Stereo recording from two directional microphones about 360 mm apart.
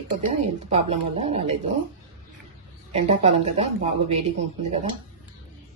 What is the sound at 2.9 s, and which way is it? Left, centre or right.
Speech, centre.